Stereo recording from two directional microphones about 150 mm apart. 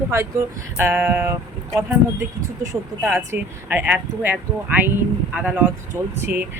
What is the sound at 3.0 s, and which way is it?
Speech, 10° right (ahead or behind).